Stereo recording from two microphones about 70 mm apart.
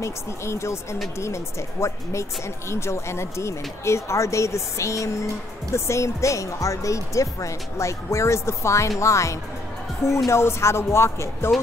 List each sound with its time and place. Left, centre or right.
0.0 s speech: left